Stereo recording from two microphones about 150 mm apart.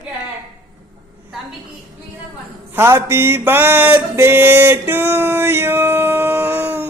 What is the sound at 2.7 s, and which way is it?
Mantra, 15° right (ahead or behind).